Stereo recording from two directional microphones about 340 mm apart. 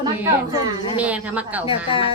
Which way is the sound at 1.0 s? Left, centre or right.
Centre.